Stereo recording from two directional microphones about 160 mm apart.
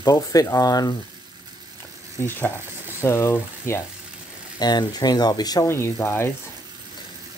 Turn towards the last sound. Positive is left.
turn(degrees=15)  # may be behind; listen again after turning